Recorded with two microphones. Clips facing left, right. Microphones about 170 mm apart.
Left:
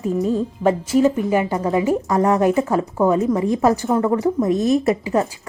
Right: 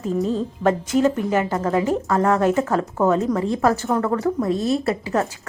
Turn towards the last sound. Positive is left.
turn(degrees=15)  # may be behind; listen again after turning